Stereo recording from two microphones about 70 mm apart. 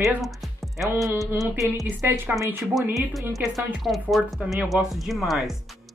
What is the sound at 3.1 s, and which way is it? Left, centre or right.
Speech, centre.